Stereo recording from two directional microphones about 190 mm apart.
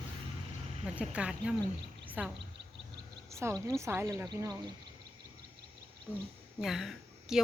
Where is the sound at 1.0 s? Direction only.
5° right (ahead or behind).